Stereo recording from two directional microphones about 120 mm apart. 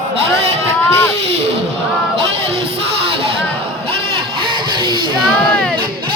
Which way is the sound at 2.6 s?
50° right (ahead or behind).